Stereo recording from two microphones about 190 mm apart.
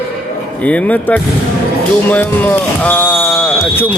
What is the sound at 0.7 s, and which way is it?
Speech, 5° left (ahead or behind).